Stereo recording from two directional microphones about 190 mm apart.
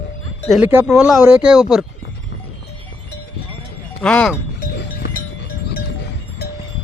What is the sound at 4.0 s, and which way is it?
Speech, 5° left (ahead or behind).